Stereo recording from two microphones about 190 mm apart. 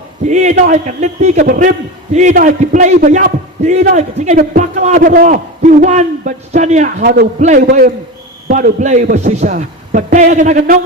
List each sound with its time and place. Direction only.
0.3 s a man's voice: 40° right (ahead or behind)